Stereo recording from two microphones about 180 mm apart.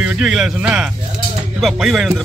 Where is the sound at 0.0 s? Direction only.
5° right (ahead or behind).